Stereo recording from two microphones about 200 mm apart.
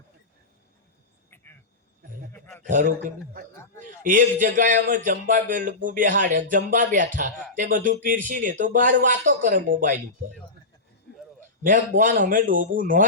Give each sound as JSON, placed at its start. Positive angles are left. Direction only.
{"t": 2.8, "sound": "a man's voice", "side_deg": -40}
{"t": 11.6, "sound": "speech", "side_deg": -40}